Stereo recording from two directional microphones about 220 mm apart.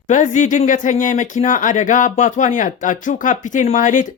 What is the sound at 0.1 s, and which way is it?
Speech, 35° left (ahead or behind).